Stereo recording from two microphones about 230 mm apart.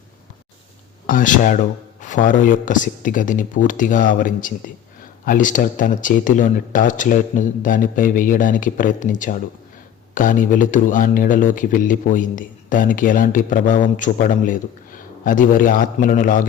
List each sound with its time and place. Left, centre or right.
1.0 s speech: left